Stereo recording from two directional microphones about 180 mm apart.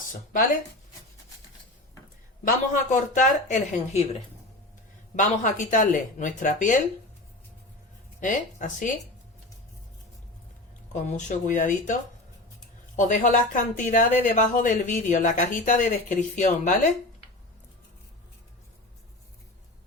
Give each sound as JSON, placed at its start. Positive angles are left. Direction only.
{"t": 2.5, "sound": "speech", "side_deg": 45}
{"t": 5.1, "sound": "speech", "side_deg": 45}
{"t": 8.2, "sound": "speech", "side_deg": 45}
{"t": 10.9, "sound": "speech", "side_deg": 45}
{"t": 13.0, "sound": "speech", "side_deg": 45}